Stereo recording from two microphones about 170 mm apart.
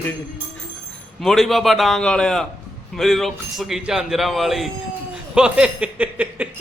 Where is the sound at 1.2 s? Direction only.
Centre (ahead or behind).